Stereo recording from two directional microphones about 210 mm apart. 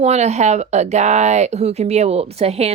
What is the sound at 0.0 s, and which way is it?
Speech, 30° right (ahead or behind).